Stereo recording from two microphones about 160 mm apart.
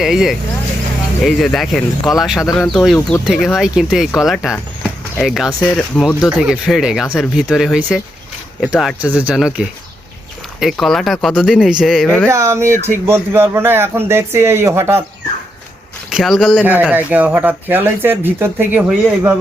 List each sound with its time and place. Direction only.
0.0 s speech: centre (ahead or behind)
4.5 s vehicle: 10° left (ahead or behind)
5.2 s speech: centre (ahead or behind)
12.0 s speech: 10° left (ahead or behind)
12.3 s speech: 20° right (ahead or behind)
16.0 s speech: 5° right (ahead or behind)
16.9 s speech: 10° right (ahead or behind)